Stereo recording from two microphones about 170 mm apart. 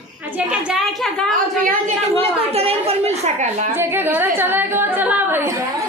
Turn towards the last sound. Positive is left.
turn(degrees=-10)  # may be behind; listen again after turning